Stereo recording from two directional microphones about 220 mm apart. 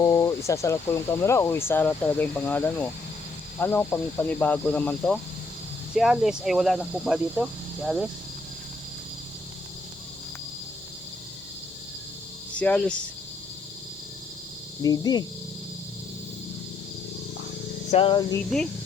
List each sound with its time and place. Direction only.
0.0 s speech: 15° left (ahead or behind); by 7.4 s 5° right (ahead or behind)
12.5 s speech: 5° left (ahead or behind)
14.8 s speech: 15° left (ahead or behind)
17.9 s music: 25° left (ahead or behind)